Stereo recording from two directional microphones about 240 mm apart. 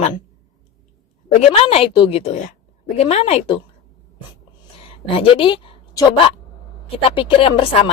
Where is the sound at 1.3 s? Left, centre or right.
Left.